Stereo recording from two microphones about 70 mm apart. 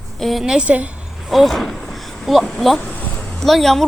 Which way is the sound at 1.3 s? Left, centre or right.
Centre.